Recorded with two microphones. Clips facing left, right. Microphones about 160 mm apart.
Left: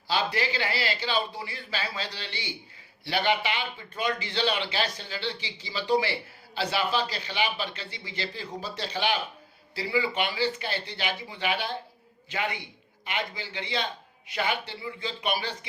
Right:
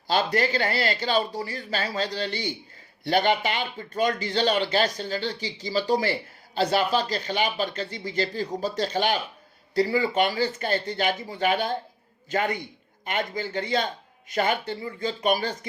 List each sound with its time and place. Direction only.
0.1 s a man's voice: 45° right (ahead or behind)